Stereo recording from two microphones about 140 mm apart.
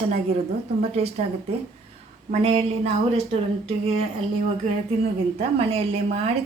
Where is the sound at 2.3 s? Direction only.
50° right (ahead or behind).